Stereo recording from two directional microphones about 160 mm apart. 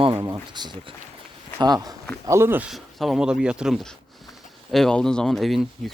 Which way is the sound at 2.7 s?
Centre (ahead or behind).